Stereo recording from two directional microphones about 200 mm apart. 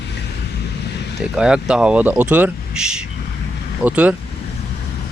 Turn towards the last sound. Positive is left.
turn(degrees=-5)  # may be behind; listen again after turning